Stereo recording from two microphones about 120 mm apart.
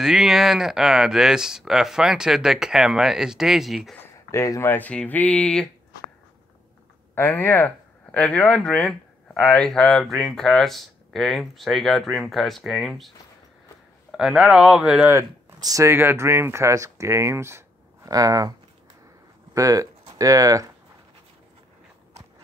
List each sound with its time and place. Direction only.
0.0 s speech: 5° right (ahead or behind)
4.0 s speech: 20° left (ahead or behind)
7.2 s speech: 20° left (ahead or behind); by 13.1 s centre (ahead or behind)
14.1 s speech: 5° right (ahead or behind)
15.1 s speech: 25° right (ahead or behind)
19.5 s speech: 30° right (ahead or behind)